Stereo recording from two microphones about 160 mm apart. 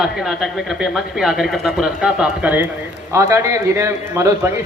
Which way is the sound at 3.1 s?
15° right (ahead or behind).